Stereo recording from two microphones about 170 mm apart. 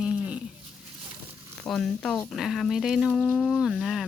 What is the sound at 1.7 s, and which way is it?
Speech, 5° left (ahead or behind).